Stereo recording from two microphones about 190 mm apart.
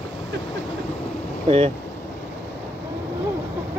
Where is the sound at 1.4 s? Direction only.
30° right (ahead or behind).